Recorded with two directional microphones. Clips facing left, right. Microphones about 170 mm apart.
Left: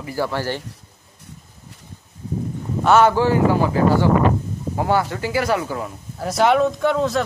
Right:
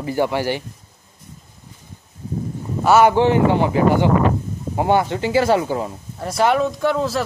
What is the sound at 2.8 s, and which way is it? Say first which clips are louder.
Speech: right 1 dB; 10° right (ahead or behind).